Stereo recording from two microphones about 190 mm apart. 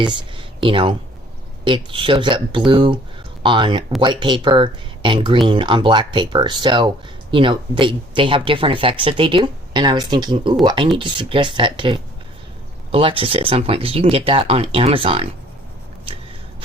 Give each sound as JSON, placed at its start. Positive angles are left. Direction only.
{"t": 0.0, "sound": "speech", "side_deg": -25}